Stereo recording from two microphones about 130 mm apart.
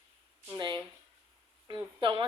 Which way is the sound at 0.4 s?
35° right (ahead or behind).